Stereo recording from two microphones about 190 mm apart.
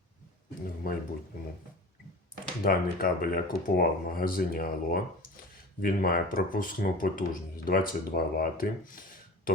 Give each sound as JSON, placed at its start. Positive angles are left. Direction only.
{"t": 0.8, "sound": "speech", "side_deg": 45}
{"t": 2.6, "sound": "speech", "side_deg": 50}